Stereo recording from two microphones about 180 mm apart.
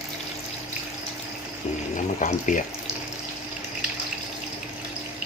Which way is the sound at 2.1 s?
45° left (ahead or behind).